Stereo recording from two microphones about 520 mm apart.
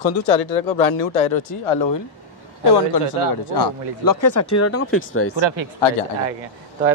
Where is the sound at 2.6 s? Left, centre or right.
Left.